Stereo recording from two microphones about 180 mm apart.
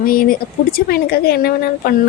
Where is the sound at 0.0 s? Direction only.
55° left (ahead or behind).